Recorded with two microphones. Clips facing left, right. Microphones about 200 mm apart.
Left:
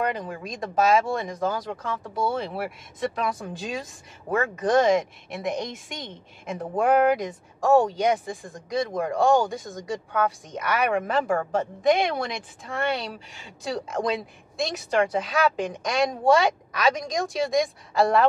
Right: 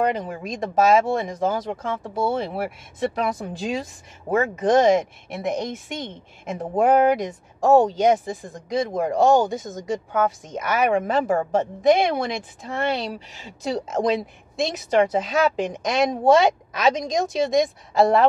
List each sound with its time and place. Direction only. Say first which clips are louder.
0.1 s speech: right 4 dB; 20° right (ahead or behind)
6.5 s speech: right 3 dB; 20° right (ahead or behind)